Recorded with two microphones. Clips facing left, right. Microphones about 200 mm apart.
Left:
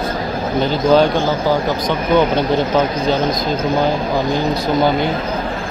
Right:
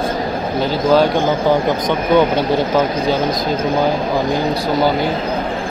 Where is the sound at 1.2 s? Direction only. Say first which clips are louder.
Right 2 dB; 20° right (ahead or behind).